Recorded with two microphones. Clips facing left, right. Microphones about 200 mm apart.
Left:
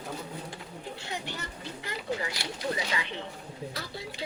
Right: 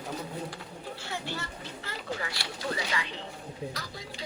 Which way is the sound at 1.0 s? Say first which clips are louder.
Right 2 dB; 20° left (ahead or behind).